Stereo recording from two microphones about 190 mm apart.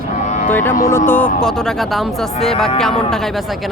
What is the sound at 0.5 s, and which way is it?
Speech, 10° left (ahead or behind).